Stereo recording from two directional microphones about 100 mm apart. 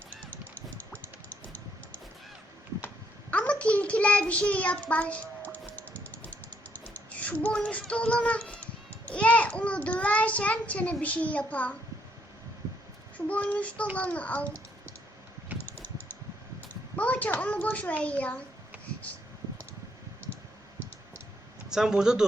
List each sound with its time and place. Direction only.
2.8 s child singing: 15° left (ahead or behind)
11.0 s a child's voice: 15° left (ahead or behind)
13.1 s a child's voice: 15° left (ahead or behind)
15.6 s typing: 15° left (ahead or behind)
16.9 s a child's voice: 15° left (ahead or behind)
21.7 s speech: 5° right (ahead or behind)